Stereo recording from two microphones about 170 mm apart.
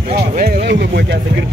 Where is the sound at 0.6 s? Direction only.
75° right (ahead or behind).